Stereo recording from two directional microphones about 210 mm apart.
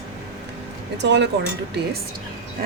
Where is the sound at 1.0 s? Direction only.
55° right (ahead or behind).